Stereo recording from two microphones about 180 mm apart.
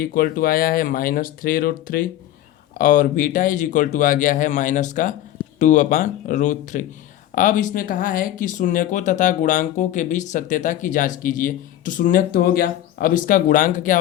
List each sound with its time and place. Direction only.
0.0 s speech: 50° left (ahead or behind)